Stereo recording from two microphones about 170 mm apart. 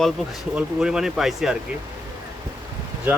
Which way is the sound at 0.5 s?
5° right (ahead or behind).